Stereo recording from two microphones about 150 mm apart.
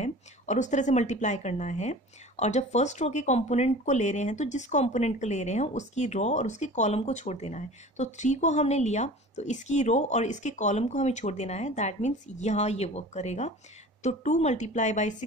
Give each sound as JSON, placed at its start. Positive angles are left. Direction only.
{"t": 0.0, "sound": "a woman's voice", "side_deg": 50}